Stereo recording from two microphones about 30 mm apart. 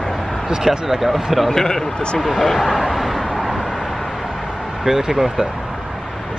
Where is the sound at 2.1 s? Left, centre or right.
Centre.